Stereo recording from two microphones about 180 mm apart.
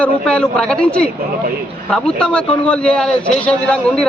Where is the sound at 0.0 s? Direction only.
5° left (ahead or behind).